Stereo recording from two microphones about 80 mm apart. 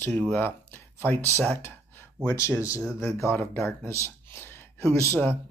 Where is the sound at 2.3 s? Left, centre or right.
Left.